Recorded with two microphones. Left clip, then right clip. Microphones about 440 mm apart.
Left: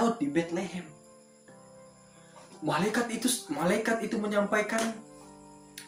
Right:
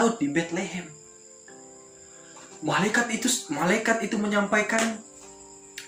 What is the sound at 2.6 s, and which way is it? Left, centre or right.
A man's voice, left.